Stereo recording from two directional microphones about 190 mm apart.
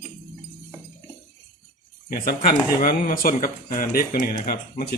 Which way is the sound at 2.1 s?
50° left (ahead or behind).